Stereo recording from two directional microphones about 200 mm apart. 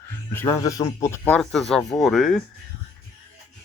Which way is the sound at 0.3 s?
15° left (ahead or behind).